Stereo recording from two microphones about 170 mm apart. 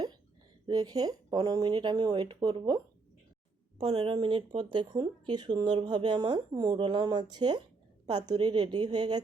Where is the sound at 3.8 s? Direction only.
35° right (ahead or behind).